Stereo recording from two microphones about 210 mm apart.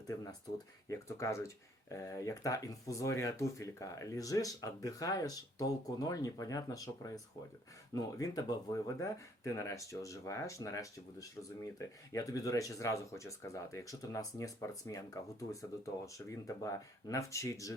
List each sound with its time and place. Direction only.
0.1 s speech: 15° left (ahead or behind)